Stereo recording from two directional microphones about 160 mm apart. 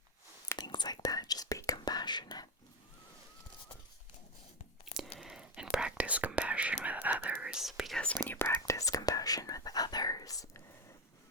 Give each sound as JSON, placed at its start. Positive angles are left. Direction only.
{"t": 0.4, "sound": "whispering", "side_deg": 25}
{"t": 5.1, "sound": "whispering", "side_deg": -5}